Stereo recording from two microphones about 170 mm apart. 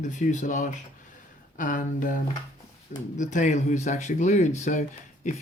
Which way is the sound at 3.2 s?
45° left (ahead or behind).